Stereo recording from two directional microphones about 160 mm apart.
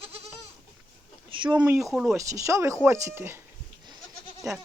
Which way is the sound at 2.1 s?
20° right (ahead or behind).